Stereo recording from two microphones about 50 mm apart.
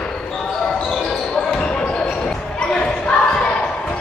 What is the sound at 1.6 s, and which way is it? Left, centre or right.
Basketball bounce, left.